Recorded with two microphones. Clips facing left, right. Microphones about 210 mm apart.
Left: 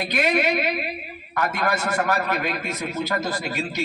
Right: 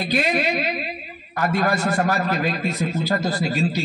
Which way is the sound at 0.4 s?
65° left (ahead or behind).